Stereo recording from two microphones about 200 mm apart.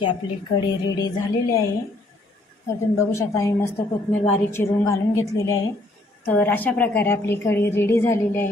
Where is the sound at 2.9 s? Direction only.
15° left (ahead or behind).